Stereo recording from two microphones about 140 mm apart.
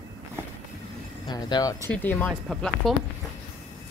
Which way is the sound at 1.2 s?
30° left (ahead or behind).